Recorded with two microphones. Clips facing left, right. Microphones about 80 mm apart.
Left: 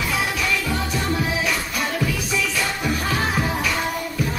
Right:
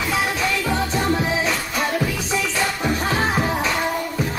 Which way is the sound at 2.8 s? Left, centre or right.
Right.